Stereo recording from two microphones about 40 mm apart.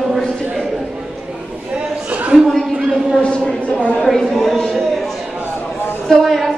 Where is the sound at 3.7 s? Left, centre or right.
Left.